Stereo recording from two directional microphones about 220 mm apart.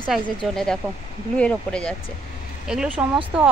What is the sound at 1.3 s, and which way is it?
A woman's voice, 5° left (ahead or behind).